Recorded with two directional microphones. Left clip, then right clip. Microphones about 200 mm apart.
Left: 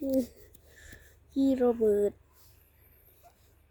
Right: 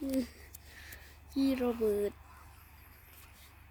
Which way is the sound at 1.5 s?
Centre (ahead or behind).